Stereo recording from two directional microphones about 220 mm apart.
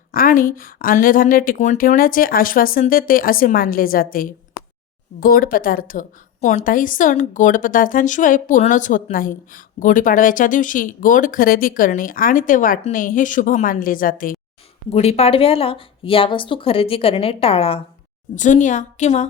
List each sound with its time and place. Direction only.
0.1 s a woman's voice: 40° left (ahead or behind)